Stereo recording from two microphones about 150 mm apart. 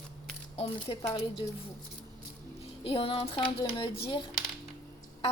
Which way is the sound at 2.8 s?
40° left (ahead or behind).